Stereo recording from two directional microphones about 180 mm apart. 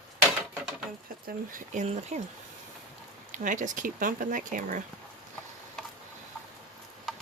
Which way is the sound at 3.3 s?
45° right (ahead or behind).